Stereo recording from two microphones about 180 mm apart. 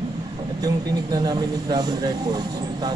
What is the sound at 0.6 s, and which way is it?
Speech, 20° right (ahead or behind).